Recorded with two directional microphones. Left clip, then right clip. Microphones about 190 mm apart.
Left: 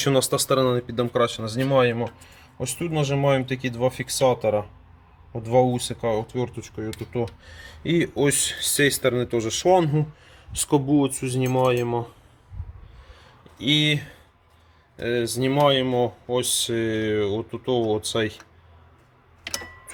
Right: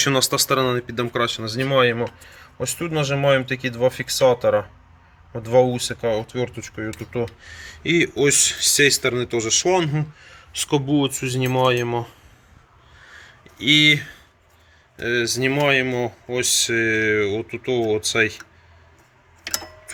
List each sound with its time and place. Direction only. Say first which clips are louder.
0.0 s speech: right 2 dB; 15° left (ahead or behind)
7.4 s speech: right 5 dB; 20° left (ahead or behind)
10.8 s speech: right 1 dB; centre (ahead or behind)
13.6 s speech: right 7 dB; 10° left (ahead or behind)
14.9 s speech: right 3 dB; 20° left (ahead or behind)